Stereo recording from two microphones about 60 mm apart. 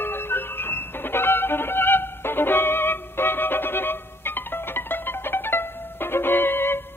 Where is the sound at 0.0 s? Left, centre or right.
Left.